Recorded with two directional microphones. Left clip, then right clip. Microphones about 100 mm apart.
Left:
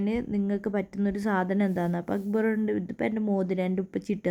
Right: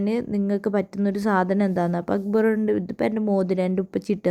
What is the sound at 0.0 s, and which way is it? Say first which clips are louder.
Speech: right 5 dB; 30° right (ahead or behind).